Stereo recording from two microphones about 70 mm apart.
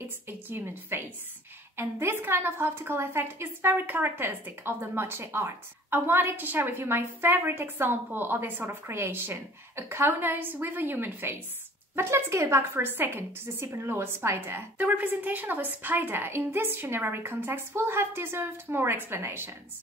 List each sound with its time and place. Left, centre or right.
0.5 s a woman's voice: right